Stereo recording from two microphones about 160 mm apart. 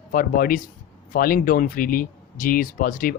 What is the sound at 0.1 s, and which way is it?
Speech, 60° left (ahead or behind).